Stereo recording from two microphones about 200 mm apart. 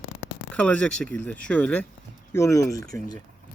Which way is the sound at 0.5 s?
5° left (ahead or behind).